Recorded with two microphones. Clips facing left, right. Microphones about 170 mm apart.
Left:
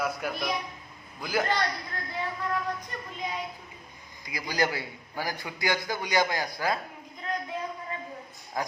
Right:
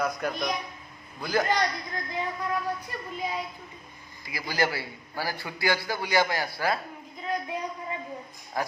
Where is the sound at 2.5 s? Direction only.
5° right (ahead or behind).